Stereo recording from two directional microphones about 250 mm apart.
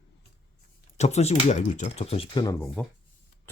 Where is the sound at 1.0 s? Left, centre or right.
Left; by 2.9 s centre.